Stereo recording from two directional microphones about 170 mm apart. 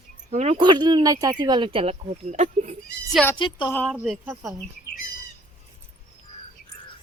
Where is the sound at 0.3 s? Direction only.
40° right (ahead or behind).